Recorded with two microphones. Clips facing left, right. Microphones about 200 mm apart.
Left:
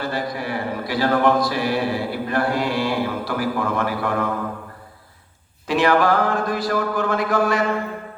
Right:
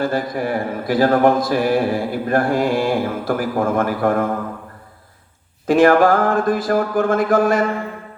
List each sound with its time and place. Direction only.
0.0 s mantra: 50° right (ahead or behind)
5.6 s mantra: 50° right (ahead or behind)